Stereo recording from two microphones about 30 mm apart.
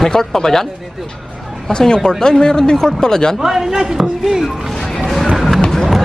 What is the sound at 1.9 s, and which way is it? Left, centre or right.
Speech, left.